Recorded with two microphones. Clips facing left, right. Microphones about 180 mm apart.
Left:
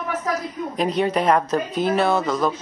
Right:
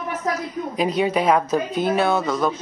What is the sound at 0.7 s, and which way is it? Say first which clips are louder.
Speech: even; 5° right (ahead or behind).